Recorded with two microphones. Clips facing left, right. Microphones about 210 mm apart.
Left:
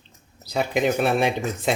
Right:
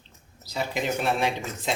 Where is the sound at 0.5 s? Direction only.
55° left (ahead or behind).